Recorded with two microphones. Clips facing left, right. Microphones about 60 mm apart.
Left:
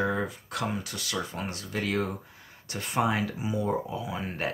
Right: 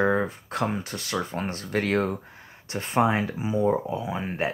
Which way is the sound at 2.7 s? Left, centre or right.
Right.